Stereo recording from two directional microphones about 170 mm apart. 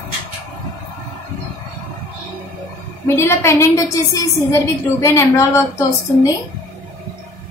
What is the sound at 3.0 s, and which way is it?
Speech, 15° left (ahead or behind).